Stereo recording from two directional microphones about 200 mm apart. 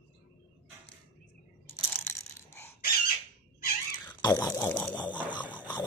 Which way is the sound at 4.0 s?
20° left (ahead or behind).